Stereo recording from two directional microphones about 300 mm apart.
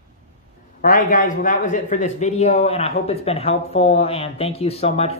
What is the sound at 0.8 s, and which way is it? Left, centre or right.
A man's voice, left.